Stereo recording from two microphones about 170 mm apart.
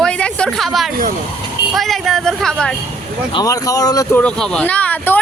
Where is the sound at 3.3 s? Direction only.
25° left (ahead or behind).